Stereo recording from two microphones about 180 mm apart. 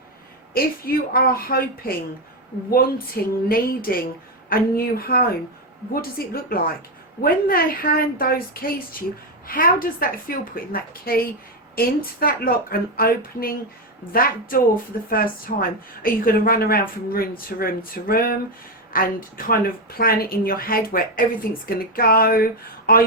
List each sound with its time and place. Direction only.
0.5 s speech: 55° left (ahead or behind)
3.2 s a woman's voice: 60° left (ahead or behind)